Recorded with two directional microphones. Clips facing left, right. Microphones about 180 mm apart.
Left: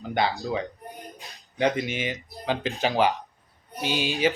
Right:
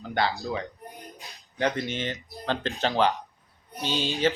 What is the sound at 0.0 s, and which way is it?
Speech, 15° left (ahead or behind).